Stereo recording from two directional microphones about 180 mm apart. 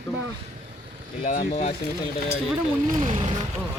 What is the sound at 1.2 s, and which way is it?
Speech, 55° left (ahead or behind).